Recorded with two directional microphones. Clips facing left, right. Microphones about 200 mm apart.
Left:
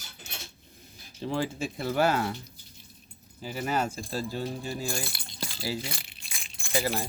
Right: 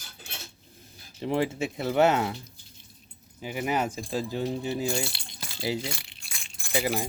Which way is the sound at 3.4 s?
15° right (ahead or behind).